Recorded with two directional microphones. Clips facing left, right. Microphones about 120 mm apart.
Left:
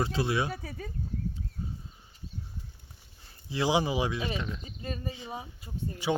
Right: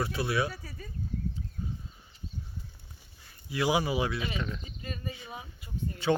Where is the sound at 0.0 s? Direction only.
25° left (ahead or behind).